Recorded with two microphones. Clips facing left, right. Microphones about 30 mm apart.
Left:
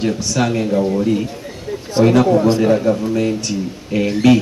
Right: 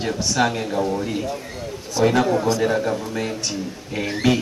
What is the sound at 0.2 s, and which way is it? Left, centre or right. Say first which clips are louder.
Speech: left 1 dB; centre.